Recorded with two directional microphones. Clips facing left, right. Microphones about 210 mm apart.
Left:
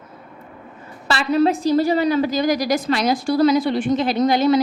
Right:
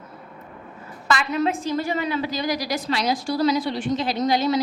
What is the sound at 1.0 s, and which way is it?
A woman's voice, 30° left (ahead or behind).